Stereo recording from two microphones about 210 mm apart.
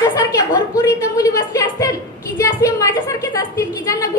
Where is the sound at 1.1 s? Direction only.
15° left (ahead or behind).